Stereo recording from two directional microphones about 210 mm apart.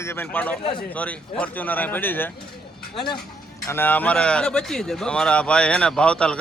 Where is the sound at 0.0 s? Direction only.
10° left (ahead or behind).